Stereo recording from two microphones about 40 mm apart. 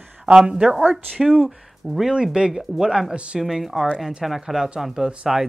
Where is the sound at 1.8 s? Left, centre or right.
Centre.